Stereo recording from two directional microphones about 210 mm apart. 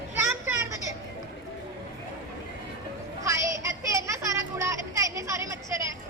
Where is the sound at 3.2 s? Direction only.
15° right (ahead or behind).